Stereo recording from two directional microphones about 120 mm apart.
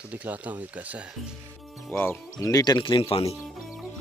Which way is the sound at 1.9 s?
20° left (ahead or behind).